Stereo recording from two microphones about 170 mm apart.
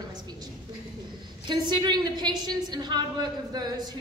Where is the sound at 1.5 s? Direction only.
25° right (ahead or behind).